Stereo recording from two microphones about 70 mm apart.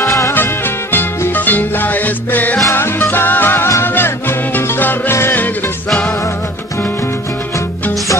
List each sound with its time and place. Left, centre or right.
0.0 s music: left
0.9 s music: left